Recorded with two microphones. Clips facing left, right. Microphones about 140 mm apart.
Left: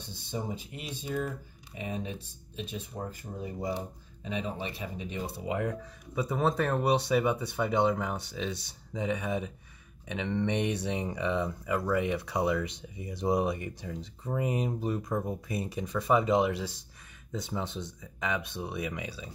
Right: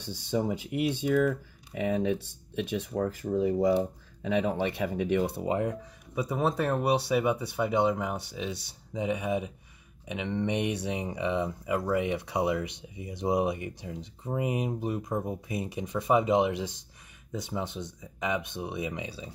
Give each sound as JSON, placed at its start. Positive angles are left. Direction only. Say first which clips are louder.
{"t": 0.0, "sound": "speech", "louder": "right 7 dB", "side_deg": -75}
{"t": 4.2, "sound": "speech", "louder": "right 7 dB", "side_deg": -75}
{"t": 5.6, "sound": "speech", "louder": "right 2 dB", "side_deg": -20}